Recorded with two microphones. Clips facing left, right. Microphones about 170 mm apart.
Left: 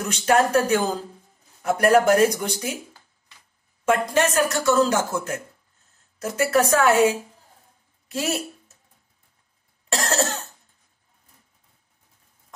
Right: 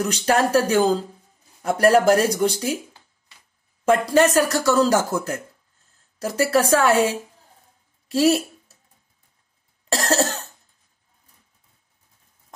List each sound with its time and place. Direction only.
0.0 s speech: 35° right (ahead or behind)
4.0 s speech: 35° right (ahead or behind)
9.8 s speech: 35° right (ahead or behind)